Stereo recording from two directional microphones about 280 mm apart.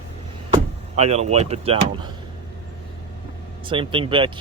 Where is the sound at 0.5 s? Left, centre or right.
Right.